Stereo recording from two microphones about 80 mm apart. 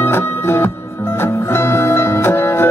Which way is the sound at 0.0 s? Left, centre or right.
Left.